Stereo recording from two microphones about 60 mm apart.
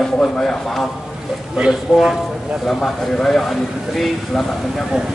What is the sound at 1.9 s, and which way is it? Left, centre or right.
Speech, centre.